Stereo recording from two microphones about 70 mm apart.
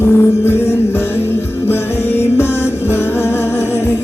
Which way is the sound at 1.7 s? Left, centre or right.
Left.